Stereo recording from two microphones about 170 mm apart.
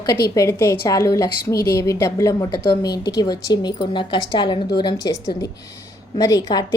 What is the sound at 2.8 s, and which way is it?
Speech, 75° left (ahead or behind).